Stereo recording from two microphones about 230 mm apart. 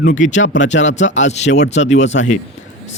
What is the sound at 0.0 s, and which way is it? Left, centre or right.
Speech, left.